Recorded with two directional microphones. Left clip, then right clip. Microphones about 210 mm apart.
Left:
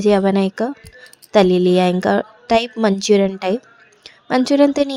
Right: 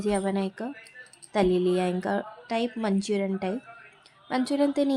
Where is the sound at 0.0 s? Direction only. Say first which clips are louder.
Left 12 dB; 35° left (ahead or behind).